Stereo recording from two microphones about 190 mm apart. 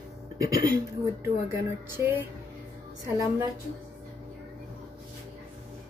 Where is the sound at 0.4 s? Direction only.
15° right (ahead or behind).